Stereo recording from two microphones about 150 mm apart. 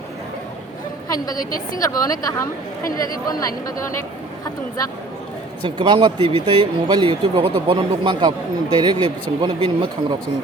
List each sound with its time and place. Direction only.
1.0 s a woman's voice: 25° left (ahead or behind)
1.4 s a woman's voice: 70° left (ahead or behind)
1.8 s a woman's voice: 25° left (ahead or behind)
5.6 s speech: 30° right (ahead or behind)